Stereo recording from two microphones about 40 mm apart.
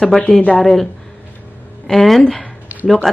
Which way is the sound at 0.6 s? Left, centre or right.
Centre.